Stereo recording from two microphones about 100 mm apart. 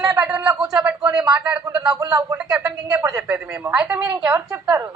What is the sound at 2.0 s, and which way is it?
Speech, 35° right (ahead or behind).